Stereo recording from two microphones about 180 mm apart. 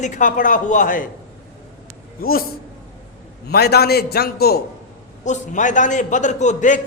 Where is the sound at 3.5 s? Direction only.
60° left (ahead or behind).